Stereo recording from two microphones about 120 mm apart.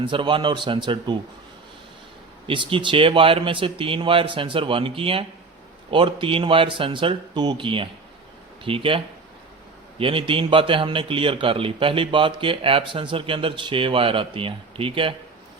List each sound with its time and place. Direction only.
0.0 s speech: 45° right (ahead or behind)
2.5 s speech: 45° right (ahead or behind)
10.0 s speech: 50° right (ahead or behind)